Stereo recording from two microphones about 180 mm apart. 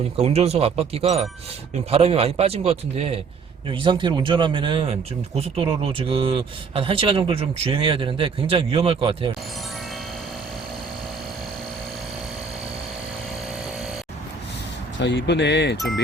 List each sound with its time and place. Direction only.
0.2 s a man's voice: 35° right (ahead or behind)
15.0 s speech: 75° left (ahead or behind)